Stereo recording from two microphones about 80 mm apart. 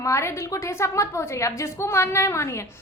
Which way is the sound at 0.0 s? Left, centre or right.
Left.